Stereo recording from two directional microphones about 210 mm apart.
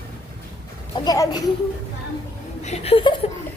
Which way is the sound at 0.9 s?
15° left (ahead or behind).